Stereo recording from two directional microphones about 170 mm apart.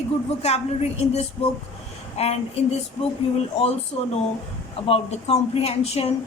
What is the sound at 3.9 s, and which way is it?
A woman's voice, 40° left (ahead or behind).